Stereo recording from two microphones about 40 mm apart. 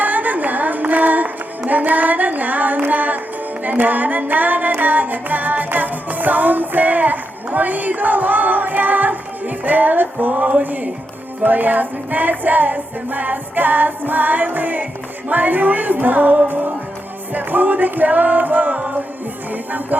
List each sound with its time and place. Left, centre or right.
0.0 s music: right